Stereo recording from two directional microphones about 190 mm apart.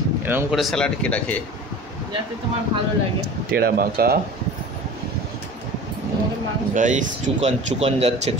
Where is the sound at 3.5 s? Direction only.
55° right (ahead or behind).